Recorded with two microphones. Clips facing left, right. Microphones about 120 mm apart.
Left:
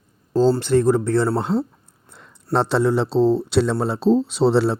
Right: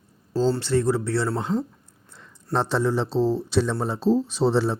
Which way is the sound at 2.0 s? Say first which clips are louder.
Left 5 dB; 60° left (ahead or behind).